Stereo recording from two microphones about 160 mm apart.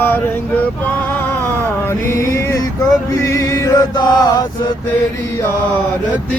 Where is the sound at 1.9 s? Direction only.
15° left (ahead or behind).